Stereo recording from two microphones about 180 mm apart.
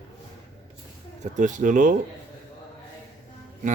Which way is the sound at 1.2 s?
45° right (ahead or behind).